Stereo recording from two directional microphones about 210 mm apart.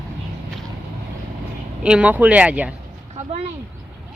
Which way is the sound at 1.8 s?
5° right (ahead or behind).